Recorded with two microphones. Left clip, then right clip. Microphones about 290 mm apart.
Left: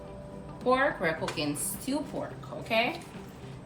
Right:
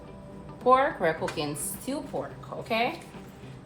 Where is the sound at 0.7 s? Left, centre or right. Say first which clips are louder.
Right 4 dB; centre.